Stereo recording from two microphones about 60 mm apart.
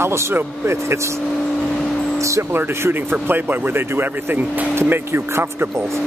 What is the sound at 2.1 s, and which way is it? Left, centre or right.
Vehicle, right.